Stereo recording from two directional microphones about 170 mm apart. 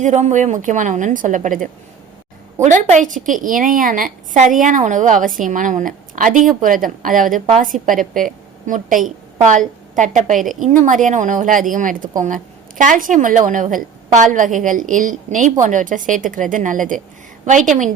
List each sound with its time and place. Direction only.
0.0 s a woman's voice: 45° right (ahead or behind)